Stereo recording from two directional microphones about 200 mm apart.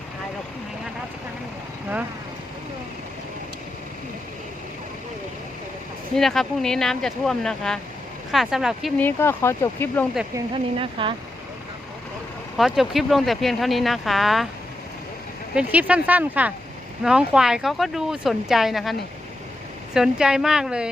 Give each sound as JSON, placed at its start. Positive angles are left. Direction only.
{"t": 6.1, "sound": "speech", "side_deg": 0}
{"t": 9.0, "sound": "speech", "side_deg": 10}
{"t": 10.3, "sound": "speech", "side_deg": -25}
{"t": 12.5, "sound": "speech", "side_deg": 0}
{"t": 15.5, "sound": "speech", "side_deg": -5}